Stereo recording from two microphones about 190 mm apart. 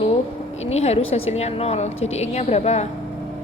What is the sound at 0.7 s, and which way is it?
A woman's voice, 35° left (ahead or behind).